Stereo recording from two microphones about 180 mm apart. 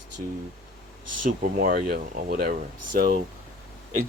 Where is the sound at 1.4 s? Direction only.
50° right (ahead or behind).